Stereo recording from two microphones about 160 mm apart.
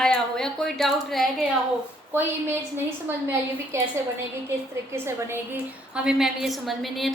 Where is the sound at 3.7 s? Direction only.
15° right (ahead or behind).